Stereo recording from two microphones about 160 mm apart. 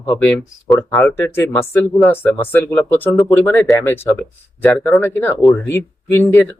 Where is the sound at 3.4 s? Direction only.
10° left (ahead or behind).